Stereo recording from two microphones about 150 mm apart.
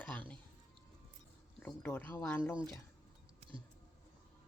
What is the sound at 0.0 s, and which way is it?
Music, 10° left (ahead or behind).